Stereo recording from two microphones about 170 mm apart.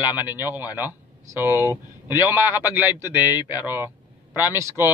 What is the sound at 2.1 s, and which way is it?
A man's voice, 15° right (ahead or behind).